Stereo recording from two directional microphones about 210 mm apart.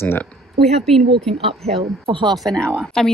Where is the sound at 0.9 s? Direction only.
30° right (ahead or behind).